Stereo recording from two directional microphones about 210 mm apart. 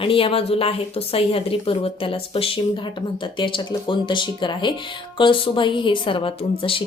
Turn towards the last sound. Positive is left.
turn(degrees=25)  # may be behind; listen again after turning